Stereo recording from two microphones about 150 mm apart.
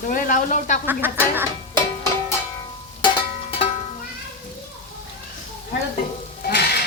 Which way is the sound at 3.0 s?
40° left (ahead or behind).